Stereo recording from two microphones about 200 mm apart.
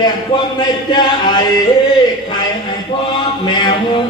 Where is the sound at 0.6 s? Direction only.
20° left (ahead or behind).